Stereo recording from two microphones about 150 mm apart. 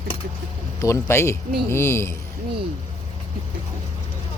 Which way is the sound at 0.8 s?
20° left (ahead or behind).